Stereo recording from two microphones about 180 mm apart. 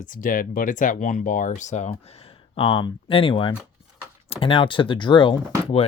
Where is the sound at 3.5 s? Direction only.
5° right (ahead or behind).